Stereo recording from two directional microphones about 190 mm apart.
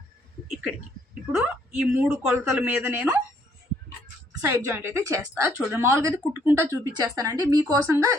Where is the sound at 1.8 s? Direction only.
10° right (ahead or behind).